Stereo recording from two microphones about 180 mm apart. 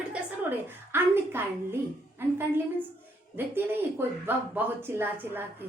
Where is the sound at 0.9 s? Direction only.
10° right (ahead or behind).